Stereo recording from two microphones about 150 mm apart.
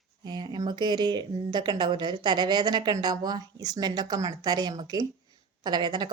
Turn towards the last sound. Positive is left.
turn(degrees=-30)  # may be behind; listen again after turning